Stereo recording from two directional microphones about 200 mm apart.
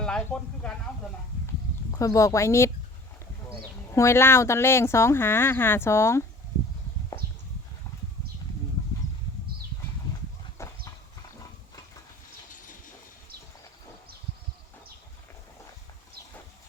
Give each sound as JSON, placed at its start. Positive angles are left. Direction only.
{"t": 0.0, "sound": "speech", "side_deg": 5}
{"t": 1.9, "sound": "speech", "side_deg": 15}
{"t": 3.9, "sound": "speech", "side_deg": 15}
{"t": 10.6, "sound": "clip-clop", "side_deg": 15}